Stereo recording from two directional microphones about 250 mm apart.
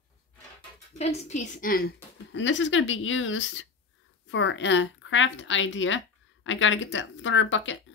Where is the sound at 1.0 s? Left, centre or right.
Left.